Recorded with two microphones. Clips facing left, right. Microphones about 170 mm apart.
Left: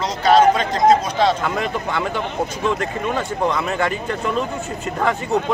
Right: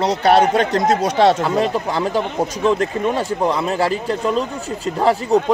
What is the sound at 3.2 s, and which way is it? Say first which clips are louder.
Speech: right 2 dB; 35° right (ahead or behind).